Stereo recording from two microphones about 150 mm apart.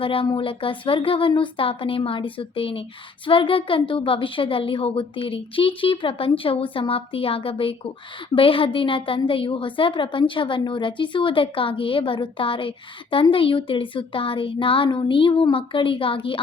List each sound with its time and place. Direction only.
0.0 s a woman's voice: 35° left (ahead or behind)